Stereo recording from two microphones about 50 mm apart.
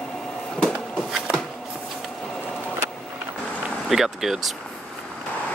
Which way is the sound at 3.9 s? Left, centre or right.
Centre.